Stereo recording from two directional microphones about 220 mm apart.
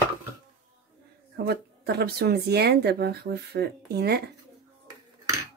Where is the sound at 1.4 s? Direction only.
45° right (ahead or behind).